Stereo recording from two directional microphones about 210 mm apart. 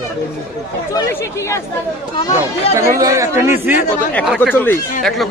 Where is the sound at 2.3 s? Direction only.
15° right (ahead or behind).